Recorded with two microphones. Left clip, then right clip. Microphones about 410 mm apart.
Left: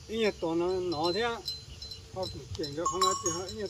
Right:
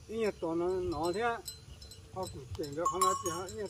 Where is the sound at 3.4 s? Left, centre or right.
Centre.